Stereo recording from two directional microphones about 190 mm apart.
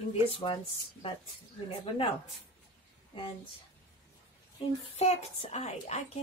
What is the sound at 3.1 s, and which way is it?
Speech, 25° left (ahead or behind).